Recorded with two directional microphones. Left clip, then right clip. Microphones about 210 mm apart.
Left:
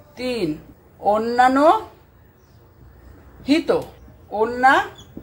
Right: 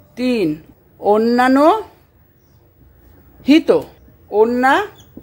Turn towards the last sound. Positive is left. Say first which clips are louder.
# right 3 dB
turn(degrees=-55)  # may be behind; listen again after turning